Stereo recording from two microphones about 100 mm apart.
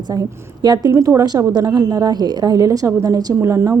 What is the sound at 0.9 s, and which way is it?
A woman's voice, 25° right (ahead or behind).